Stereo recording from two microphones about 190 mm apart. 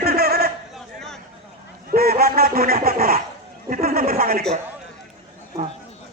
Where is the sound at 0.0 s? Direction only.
55° right (ahead or behind).